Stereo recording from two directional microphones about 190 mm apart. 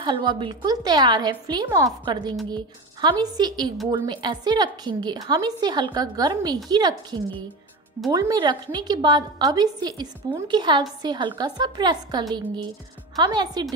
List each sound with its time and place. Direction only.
0.0 s a woman's voice: 25° right (ahead or behind)